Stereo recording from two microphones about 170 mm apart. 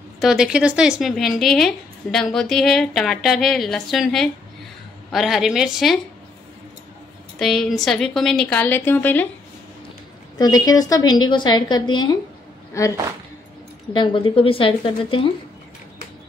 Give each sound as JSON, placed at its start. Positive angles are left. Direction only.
{"t": 0.2, "sound": "a woman's voice", "side_deg": -5}
{"t": 7.3, "sound": "a woman's voice", "side_deg": 0}
{"t": 10.3, "sound": "a woman's voice", "side_deg": 20}
{"t": 13.9, "sound": "a woman's voice", "side_deg": 30}